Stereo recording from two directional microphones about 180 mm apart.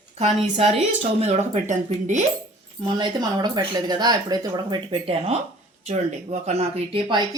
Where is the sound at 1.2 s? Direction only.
40° right (ahead or behind).